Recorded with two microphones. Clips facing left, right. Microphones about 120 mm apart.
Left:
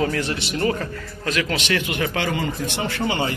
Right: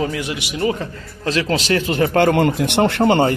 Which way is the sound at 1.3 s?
30° right (ahead or behind).